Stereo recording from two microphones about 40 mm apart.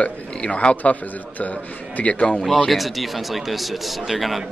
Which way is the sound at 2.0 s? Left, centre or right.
Left.